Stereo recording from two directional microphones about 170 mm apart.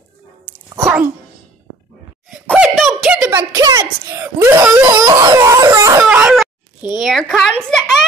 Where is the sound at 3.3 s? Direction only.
20° right (ahead or behind).